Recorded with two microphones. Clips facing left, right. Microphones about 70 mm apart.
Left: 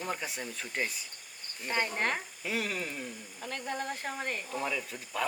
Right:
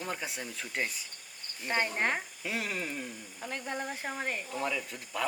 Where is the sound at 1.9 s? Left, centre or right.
Centre.